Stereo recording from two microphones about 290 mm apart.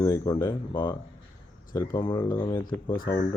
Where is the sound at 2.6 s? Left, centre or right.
Left.